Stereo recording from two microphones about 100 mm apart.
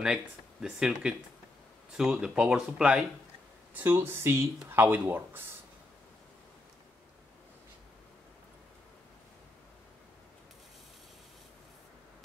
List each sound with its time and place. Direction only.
0.0 s speech: 5° right (ahead or behind)
3.7 s speech: 20° right (ahead or behind)